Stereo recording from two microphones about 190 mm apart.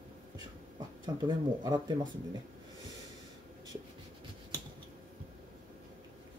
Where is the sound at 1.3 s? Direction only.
20° right (ahead or behind).